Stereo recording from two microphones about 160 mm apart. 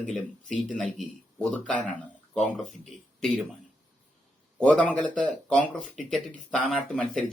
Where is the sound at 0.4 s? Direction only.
55° right (ahead or behind).